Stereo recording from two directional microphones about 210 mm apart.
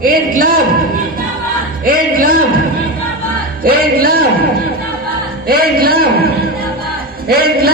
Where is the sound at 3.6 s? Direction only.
45° right (ahead or behind).